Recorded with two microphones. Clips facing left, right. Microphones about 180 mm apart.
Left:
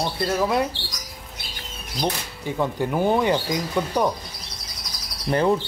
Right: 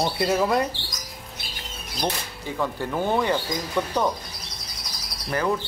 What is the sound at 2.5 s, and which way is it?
Speech, 15° left (ahead or behind).